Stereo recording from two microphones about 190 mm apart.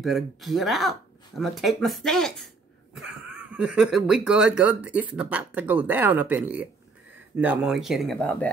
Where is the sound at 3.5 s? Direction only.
5° right (ahead or behind).